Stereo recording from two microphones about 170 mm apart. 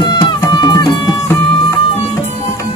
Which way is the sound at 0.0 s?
25° left (ahead or behind).